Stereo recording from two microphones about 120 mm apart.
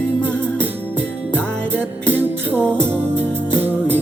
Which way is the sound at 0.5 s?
15° right (ahead or behind).